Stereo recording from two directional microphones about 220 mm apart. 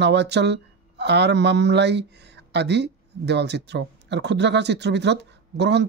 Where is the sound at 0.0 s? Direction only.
50° right (ahead or behind).